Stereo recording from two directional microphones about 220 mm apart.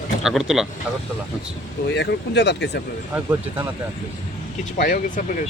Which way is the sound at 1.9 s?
50° left (ahead or behind).